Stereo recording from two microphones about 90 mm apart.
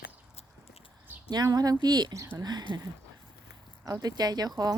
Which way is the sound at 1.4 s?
45° right (ahead or behind).